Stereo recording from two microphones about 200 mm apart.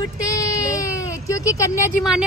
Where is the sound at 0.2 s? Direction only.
15° left (ahead or behind).